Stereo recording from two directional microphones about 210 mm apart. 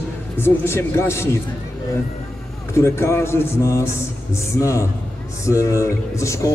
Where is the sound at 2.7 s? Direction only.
10° left (ahead or behind).